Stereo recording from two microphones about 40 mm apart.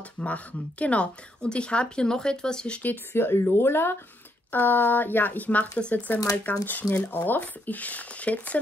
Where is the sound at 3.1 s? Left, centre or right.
Left.